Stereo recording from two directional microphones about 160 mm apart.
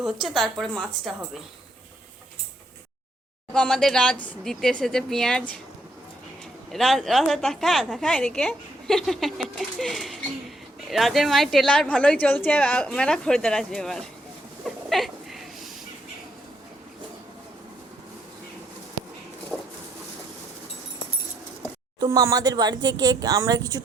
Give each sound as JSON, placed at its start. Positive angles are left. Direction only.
{"t": 0.0, "sound": "a woman's voice", "side_deg": 0}
{"t": 3.5, "sound": "a woman's voice", "side_deg": 5}
{"t": 6.7, "sound": "a woman's voice", "side_deg": 0}
{"t": 14.6, "sound": "a sound", "side_deg": 0}
{"t": 19.5, "sound": "a sound", "side_deg": -10}
{"t": 22.0, "sound": "speech", "side_deg": -20}